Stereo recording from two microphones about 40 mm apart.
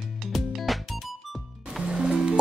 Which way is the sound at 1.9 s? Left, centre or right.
Centre.